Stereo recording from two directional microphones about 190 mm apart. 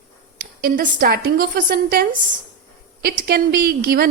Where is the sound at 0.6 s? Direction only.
50° right (ahead or behind).